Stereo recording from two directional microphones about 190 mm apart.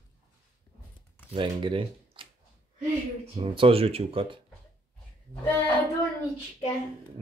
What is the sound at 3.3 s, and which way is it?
Speech, 30° right (ahead or behind).